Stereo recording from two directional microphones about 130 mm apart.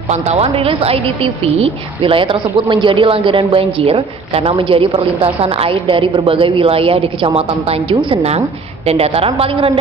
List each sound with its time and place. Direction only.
0.1 s a woman's voice: 55° right (ahead or behind)